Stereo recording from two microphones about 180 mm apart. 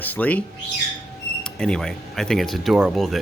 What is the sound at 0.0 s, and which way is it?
Speech, 10° left (ahead or behind).